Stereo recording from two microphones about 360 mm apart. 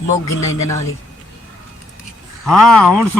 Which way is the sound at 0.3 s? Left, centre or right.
Left.